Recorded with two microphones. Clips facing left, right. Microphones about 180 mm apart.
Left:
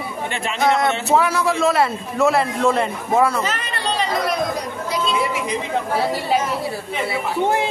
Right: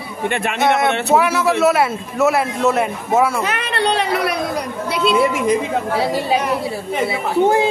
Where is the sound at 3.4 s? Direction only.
65° right (ahead or behind).